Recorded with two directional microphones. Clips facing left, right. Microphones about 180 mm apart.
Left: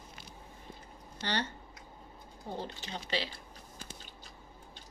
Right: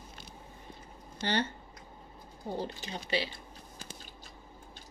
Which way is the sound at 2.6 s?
10° right (ahead or behind).